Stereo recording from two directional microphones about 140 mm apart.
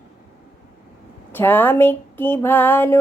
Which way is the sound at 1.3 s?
15° left (ahead or behind).